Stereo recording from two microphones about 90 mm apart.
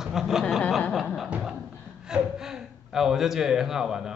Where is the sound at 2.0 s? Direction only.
5° right (ahead or behind).